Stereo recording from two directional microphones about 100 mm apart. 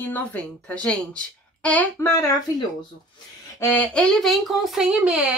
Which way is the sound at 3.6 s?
15° left (ahead or behind).